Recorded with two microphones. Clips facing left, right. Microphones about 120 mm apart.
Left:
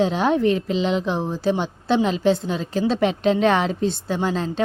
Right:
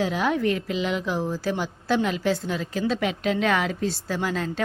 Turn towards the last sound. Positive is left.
turn(degrees=25)  # may be behind; listen again after turning